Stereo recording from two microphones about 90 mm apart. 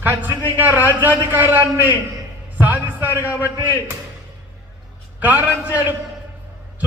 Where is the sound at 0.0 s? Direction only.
25° right (ahead or behind).